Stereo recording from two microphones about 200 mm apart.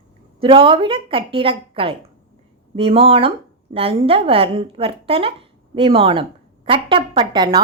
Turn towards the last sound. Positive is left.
turn(degrees=-20)  # may be behind; listen again after turning